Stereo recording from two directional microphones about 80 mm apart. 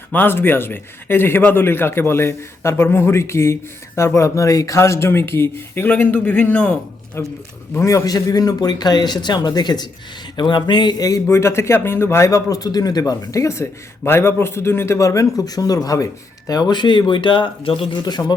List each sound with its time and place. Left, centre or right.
0.1 s a man's voice: left
7.2 s a man's voice: left
10.3 s speech: left
11.3 s speech: left